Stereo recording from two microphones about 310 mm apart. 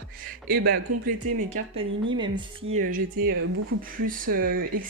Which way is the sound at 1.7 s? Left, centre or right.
Centre.